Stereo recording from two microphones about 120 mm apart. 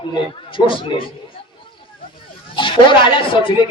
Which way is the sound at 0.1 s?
45° left (ahead or behind).